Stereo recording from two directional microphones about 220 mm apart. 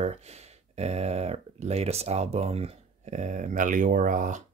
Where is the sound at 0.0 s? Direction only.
30° right (ahead or behind).